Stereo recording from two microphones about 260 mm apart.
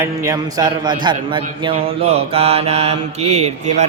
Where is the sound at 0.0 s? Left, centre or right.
Centre.